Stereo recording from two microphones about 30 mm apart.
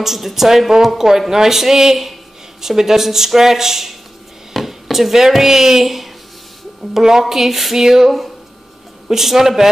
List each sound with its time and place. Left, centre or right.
0.0 s speech: centre
9.1 s speech: centre